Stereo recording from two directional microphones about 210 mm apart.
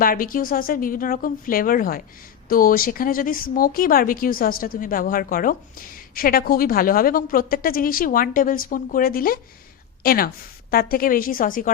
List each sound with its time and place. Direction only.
0.0 s a woman's voice: 40° left (ahead or behind)